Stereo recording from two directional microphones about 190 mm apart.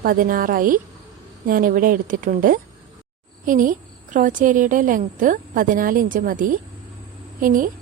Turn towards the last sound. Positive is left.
turn(degrees=-45)  # may be behind; listen again after turning